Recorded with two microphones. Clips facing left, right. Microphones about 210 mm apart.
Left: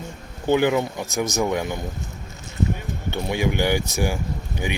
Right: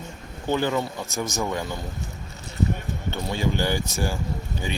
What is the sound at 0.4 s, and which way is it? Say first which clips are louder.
Speech: left 5 dB; 15° left (ahead or behind).